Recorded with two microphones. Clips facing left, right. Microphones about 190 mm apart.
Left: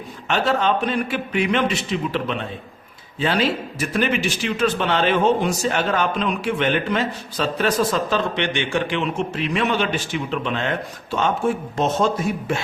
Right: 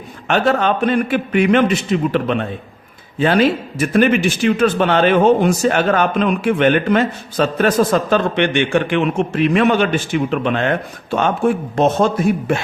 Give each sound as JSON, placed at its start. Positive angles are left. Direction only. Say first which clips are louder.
{"t": 0.3, "sound": "a man's voice", "louder": "right 4 dB", "side_deg": -55}